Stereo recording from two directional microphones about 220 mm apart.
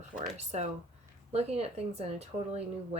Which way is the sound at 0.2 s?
30° right (ahead or behind).